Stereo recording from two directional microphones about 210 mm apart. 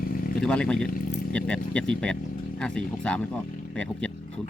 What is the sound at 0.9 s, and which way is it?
Vehicle, 40° left (ahead or behind).